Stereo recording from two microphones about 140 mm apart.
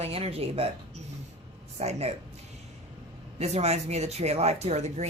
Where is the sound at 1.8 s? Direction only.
50° right (ahead or behind).